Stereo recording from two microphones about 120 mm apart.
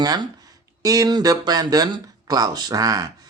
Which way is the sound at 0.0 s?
35° right (ahead or behind).